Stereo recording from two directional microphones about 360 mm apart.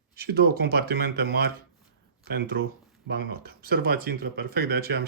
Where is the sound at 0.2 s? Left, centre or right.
Right.